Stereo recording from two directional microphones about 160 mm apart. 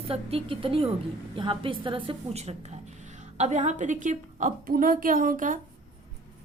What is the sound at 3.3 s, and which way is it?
A woman's voice, 45° right (ahead or behind).